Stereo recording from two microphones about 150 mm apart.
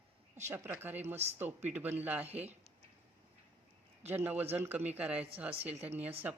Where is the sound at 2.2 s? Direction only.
45° right (ahead or behind).